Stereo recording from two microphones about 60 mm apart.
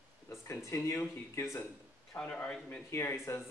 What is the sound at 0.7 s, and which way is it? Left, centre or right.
Speech, left.